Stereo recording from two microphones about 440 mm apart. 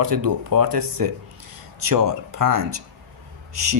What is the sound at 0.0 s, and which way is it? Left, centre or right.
Speech, right.